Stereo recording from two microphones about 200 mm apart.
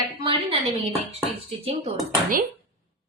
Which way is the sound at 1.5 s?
30° right (ahead or behind).